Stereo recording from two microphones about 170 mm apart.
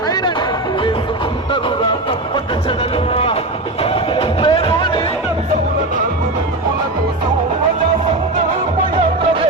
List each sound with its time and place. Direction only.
0.1 s music: 25° left (ahead or behind)